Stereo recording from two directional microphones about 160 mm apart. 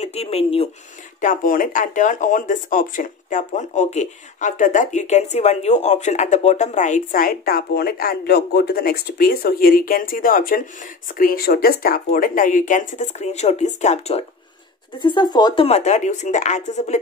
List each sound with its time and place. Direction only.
0.0 s speech: 40° left (ahead or behind)
1.2 s speech: 55° left (ahead or behind)
15.0 s speech: 30° left (ahead or behind); by 17.0 s 45° left (ahead or behind)